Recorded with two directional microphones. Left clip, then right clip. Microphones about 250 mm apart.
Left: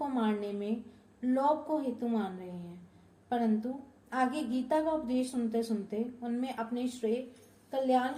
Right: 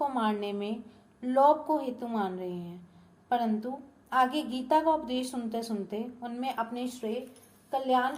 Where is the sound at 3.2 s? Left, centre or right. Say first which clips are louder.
Right 3 dB; right.